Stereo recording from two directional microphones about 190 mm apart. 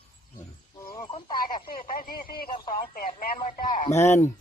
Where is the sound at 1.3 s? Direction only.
50° left (ahead or behind).